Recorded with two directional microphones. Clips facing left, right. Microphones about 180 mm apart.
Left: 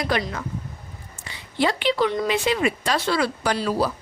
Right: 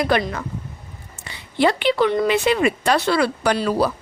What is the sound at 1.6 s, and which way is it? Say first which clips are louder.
Speech: right 4 dB; 60° right (ahead or behind).